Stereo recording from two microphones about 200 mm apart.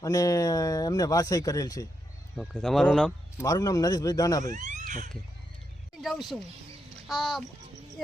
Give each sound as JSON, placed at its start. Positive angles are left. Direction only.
{"t": 0.0, "sound": "speech", "side_deg": 15}
{"t": 2.3, "sound": "speech", "side_deg": 0}
{"t": 3.4, "sound": "speech", "side_deg": 15}
{"t": 4.4, "sound": "speech", "side_deg": -35}
{"t": 6.0, "sound": "speech", "side_deg": 0}